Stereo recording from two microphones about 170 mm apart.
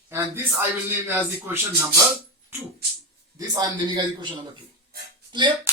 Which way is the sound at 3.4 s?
25° right (ahead or behind).